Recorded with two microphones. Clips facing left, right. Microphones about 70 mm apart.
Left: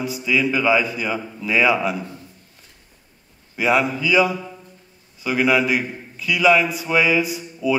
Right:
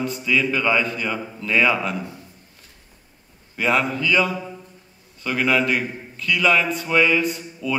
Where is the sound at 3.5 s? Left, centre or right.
Centre.